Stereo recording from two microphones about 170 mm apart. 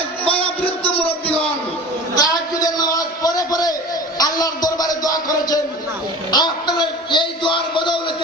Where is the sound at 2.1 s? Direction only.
20° left (ahead or behind).